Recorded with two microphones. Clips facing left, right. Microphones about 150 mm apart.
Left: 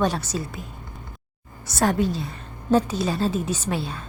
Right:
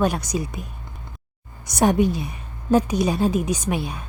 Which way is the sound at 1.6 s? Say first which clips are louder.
Right 3 dB; 15° right (ahead or behind).